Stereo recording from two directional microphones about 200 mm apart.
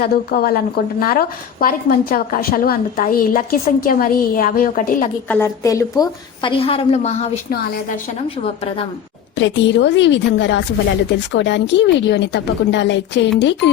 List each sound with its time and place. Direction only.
0.0 s a woman's voice: 50° left (ahead or behind)
5.3 s a woman's voice: 15° left (ahead or behind); by 7.3 s 35° left (ahead or behind)
9.4 s a woman's voice: 65° left (ahead or behind)